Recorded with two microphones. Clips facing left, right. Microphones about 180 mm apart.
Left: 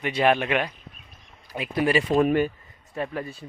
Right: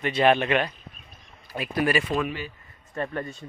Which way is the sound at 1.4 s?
20° left (ahead or behind).